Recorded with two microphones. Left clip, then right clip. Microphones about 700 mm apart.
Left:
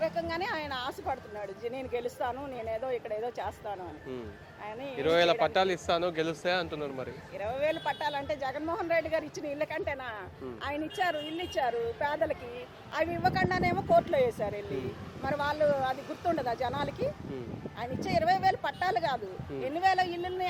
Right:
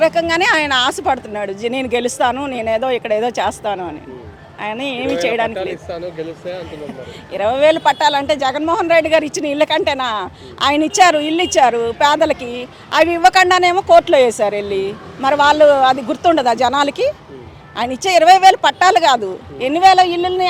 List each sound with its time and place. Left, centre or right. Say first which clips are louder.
0.0 s speech: right 18 dB; right
5.5 s speech: right 4 dB; left
7.3 s speech: right 19 dB; right